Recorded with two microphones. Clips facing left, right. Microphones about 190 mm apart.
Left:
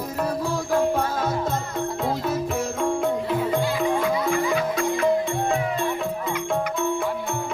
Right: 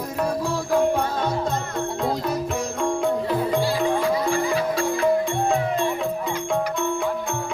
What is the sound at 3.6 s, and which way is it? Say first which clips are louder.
Music: right 1 dB; 35° right (ahead or behind).